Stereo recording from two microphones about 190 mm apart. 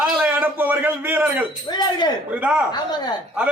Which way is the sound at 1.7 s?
20° left (ahead or behind).